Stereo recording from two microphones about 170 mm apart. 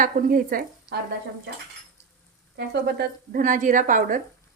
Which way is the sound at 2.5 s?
75° right (ahead or behind).